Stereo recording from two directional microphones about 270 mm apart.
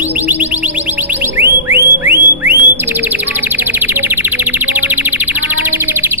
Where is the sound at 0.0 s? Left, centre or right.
Centre.